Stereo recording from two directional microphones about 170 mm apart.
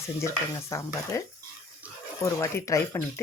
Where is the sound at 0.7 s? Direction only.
15° left (ahead or behind).